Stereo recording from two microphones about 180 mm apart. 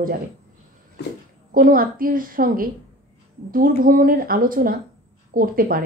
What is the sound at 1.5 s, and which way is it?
Speech, 50° right (ahead or behind).